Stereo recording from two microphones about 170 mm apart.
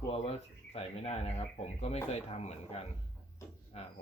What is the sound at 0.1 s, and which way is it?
Speech, 35° left (ahead or behind).